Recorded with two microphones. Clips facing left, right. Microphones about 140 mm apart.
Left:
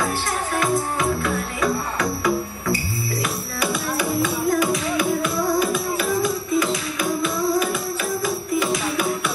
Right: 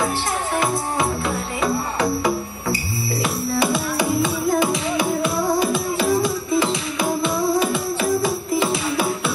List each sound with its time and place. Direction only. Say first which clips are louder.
0.6 s music: left 1 dB; 25° right (ahead or behind)
3.5 s music: right 3 dB; 25° right (ahead or behind)